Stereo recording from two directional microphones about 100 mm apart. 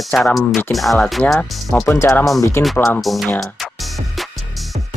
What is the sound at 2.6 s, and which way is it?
Speech, 25° left (ahead or behind).